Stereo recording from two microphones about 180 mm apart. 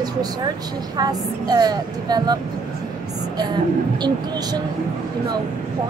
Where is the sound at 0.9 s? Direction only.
20° right (ahead or behind).